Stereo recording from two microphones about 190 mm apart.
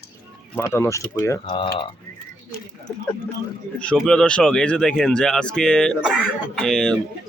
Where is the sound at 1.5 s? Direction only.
25° left (ahead or behind).